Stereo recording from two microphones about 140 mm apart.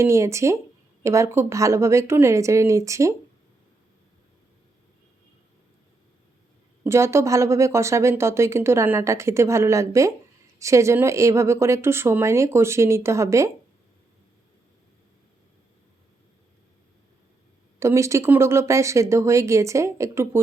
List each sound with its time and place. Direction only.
0.0 s a woman's voice: 20° right (ahead or behind)
6.8 s a woman's voice: 20° right (ahead or behind)
17.7 s a woman's voice: 20° right (ahead or behind)